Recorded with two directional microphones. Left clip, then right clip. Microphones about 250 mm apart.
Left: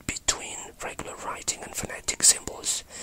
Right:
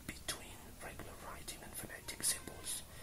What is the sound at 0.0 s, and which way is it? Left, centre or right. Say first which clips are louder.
Whispering: left 16 dB; left.